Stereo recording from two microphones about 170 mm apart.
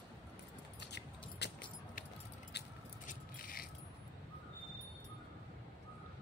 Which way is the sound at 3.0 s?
50° left (ahead or behind).